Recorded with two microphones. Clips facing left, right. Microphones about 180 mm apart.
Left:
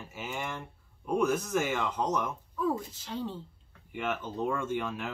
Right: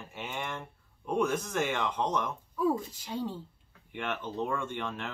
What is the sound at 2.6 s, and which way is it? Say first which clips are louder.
Speech: right 2 dB; 10° right (ahead or behind).